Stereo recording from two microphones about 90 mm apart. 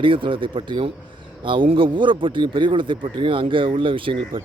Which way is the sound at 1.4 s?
70° right (ahead or behind).